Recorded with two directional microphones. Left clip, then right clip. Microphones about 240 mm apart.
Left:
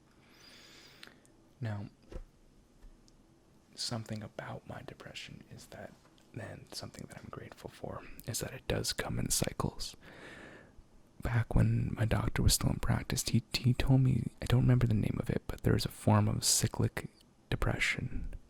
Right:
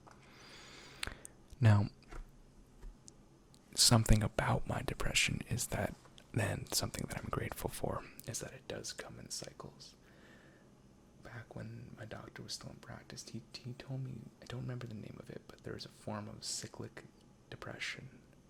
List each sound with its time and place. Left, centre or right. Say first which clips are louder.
0.3 s a sound: even; centre
1.6 s speech: right 9 dB; centre
3.7 s speech: right 10 dB; right; by 18.2 s centre